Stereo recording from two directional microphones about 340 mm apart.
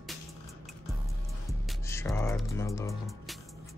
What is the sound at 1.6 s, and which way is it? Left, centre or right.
Speech, centre.